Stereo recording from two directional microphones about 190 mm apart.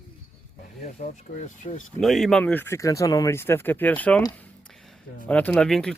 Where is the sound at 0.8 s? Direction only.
40° left (ahead or behind).